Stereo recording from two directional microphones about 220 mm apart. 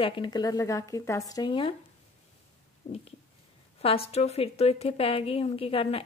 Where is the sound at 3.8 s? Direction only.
25° left (ahead or behind).